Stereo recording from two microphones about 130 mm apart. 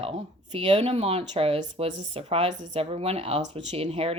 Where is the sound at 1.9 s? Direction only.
65° right (ahead or behind).